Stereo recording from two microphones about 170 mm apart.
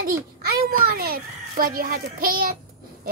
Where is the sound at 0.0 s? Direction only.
60° right (ahead or behind).